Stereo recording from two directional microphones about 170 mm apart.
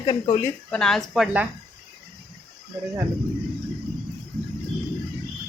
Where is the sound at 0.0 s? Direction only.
25° left (ahead or behind).